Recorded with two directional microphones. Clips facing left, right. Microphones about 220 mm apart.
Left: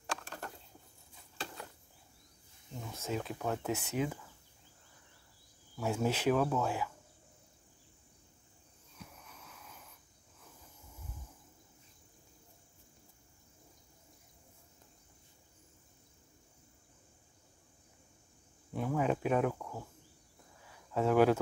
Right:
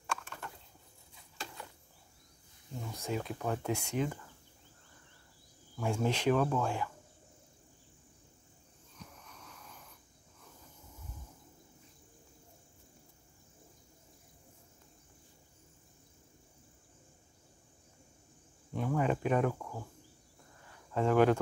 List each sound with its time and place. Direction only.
0.0 s a sound: 40° left (ahead or behind)
2.8 s speech: centre (ahead or behind)
5.8 s speech: 5° left (ahead or behind)
8.9 s wheeze: 5° left (ahead or behind)
18.7 s cricket: 5° left (ahead or behind)
20.6 s a sound: 5° left (ahead or behind)